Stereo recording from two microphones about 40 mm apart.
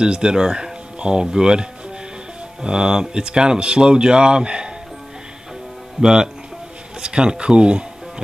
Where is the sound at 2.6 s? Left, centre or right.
Centre.